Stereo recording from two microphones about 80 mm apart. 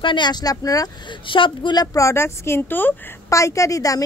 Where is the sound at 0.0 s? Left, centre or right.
Left.